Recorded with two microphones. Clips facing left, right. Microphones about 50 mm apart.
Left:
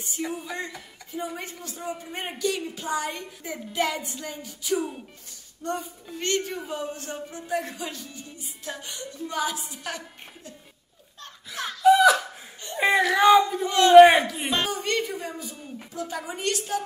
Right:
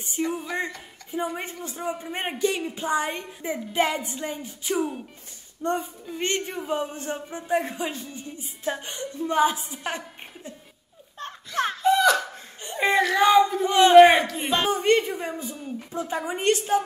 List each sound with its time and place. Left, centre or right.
0.2 s speech: centre
1.1 s a woman's voice: right
4.7 s speech: centre
5.6 s a woman's voice: right
11.1 s a sound: right
11.8 s laughter: centre
12.7 s a sound: centre
13.7 s a woman's voice: centre
13.9 s speech: centre
14.7 s a woman's voice: right